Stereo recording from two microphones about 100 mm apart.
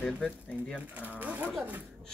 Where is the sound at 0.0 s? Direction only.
10° left (ahead or behind).